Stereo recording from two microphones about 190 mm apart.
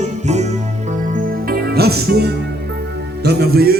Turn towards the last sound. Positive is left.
turn(degrees=-55)  # may be behind; listen again after turning